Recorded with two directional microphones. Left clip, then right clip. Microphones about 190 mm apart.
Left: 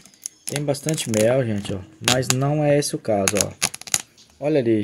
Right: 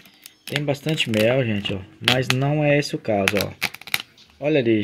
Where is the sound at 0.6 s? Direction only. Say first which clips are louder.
Right 1 dB; centre (ahead or behind).